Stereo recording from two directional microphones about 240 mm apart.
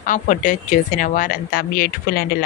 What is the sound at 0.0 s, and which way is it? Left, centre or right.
A woman's voice, left.